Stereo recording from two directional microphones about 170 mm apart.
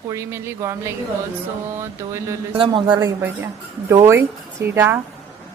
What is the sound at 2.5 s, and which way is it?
Speech, 30° right (ahead or behind).